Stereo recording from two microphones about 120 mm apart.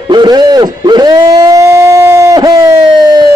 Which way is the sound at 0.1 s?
35° right (ahead or behind).